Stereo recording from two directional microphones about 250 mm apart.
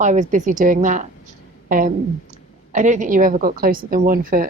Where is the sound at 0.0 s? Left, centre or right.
Right.